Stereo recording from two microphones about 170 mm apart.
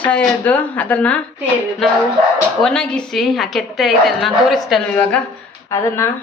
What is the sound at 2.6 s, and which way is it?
A woman's voice, 5° left (ahead or behind).